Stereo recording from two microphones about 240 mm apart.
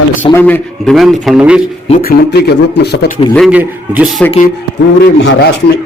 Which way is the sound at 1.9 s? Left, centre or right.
Left.